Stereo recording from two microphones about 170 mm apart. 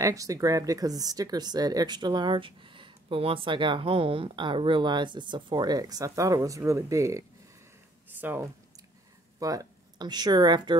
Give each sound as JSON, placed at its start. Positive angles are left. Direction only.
{"t": 0.0, "sound": "speech", "side_deg": -20}